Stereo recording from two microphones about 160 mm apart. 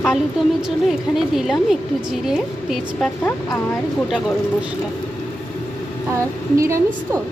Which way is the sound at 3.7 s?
Centre (ahead or behind).